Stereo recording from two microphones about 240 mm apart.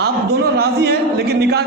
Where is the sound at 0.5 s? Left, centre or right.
Right.